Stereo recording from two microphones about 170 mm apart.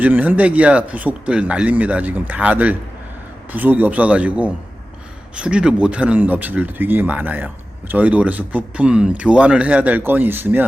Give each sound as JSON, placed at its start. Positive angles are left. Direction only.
{"t": 0.0, "sound": "speech", "side_deg": -10}